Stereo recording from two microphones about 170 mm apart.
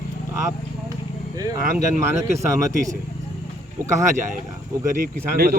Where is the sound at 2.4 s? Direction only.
15° right (ahead or behind).